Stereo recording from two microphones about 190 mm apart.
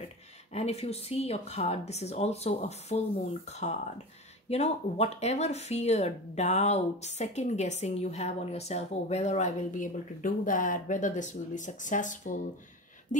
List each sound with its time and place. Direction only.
0.5 s speech: 35° left (ahead or behind)